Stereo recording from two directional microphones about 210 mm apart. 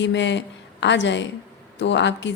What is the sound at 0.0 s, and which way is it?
Speech, 60° left (ahead or behind).